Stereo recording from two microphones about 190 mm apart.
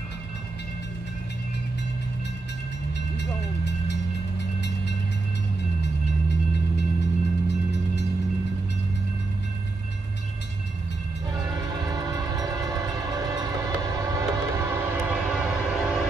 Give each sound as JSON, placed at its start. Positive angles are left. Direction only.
{"t": 3.2, "sound": "vehicle", "side_deg": 65}
{"t": 6.8, "sound": "vehicle", "side_deg": 65}
{"t": 11.7, "sound": "train", "side_deg": -20}